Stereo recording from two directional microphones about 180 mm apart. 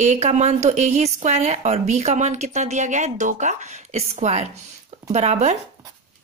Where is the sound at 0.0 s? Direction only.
40° right (ahead or behind).